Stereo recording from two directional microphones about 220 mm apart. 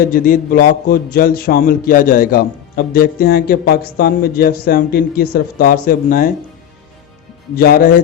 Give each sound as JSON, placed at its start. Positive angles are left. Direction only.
{"t": 0.1, "sound": "a man's voice", "side_deg": 40}
{"t": 7.5, "sound": "a man's voice", "side_deg": 45}